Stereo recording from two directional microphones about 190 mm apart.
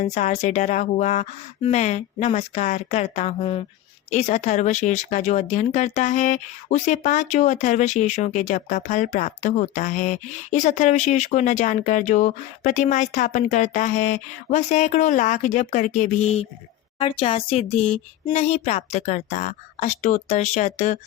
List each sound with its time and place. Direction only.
0.0 s speech: 35° left (ahead or behind)